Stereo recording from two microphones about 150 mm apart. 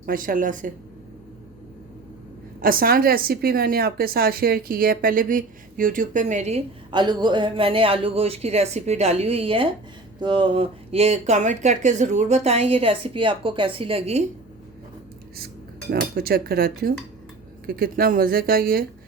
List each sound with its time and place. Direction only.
0.0 s a woman's voice: 70° right (ahead or behind)
2.6 s a woman's voice: 75° right (ahead or behind); by 6.6 s 50° right (ahead or behind)
6.9 s speech: 30° right (ahead or behind)
15.9 s speech: 90° right
17.7 s a woman's voice: 80° right